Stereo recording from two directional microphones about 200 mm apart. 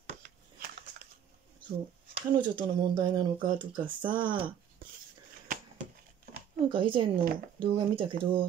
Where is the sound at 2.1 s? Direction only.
25° right (ahead or behind).